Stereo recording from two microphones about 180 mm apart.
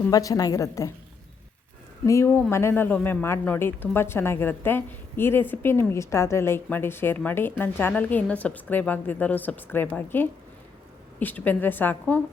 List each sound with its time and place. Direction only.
0.1 s a woman's voice: 20° left (ahead or behind)
2.0 s speech: 15° left (ahead or behind)